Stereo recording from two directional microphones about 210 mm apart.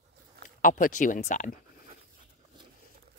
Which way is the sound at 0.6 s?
40° left (ahead or behind).